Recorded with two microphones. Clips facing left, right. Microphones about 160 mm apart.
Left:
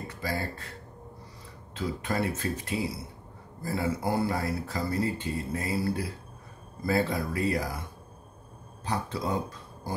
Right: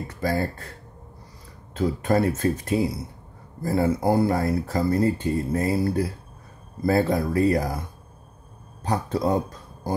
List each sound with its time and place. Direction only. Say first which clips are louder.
0.2 s speech: right 8 dB; 50° right (ahead or behind)
1.8 s speech: right 8 dB; 45° right (ahead or behind)
8.8 s speech: right 7 dB; 45° right (ahead or behind)